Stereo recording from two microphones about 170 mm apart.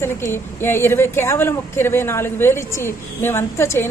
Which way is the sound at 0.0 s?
15° left (ahead or behind).